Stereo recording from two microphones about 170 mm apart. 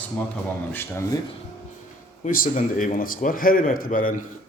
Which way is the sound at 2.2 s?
50° left (ahead or behind).